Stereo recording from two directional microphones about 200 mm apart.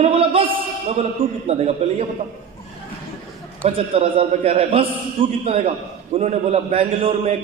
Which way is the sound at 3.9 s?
30° right (ahead or behind).